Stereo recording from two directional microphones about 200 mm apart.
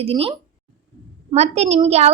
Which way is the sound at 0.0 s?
30° right (ahead or behind).